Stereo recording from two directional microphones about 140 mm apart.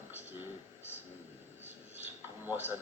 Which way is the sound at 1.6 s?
15° right (ahead or behind).